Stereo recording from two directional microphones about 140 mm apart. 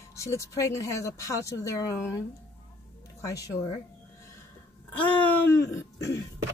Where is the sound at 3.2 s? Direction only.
25° left (ahead or behind).